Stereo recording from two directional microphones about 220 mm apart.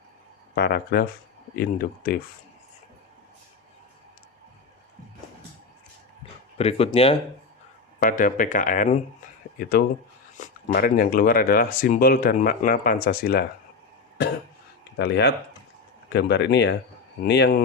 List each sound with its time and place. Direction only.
0.5 s speech: 45° left (ahead or behind)
6.6 s speech: 25° left (ahead or behind)
7.9 s speech: 40° left (ahead or behind)
14.9 s speech: 50° left (ahead or behind)